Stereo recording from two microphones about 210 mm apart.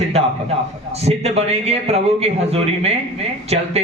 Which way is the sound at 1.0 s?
30° right (ahead or behind).